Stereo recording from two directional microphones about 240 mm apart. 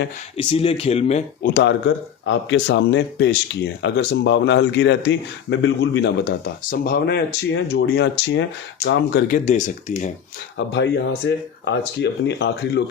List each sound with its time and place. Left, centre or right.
0.3 s speech: left
2.2 s speech: left
10.7 s speech: left